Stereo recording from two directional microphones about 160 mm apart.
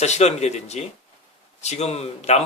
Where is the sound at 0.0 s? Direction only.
45° left (ahead or behind).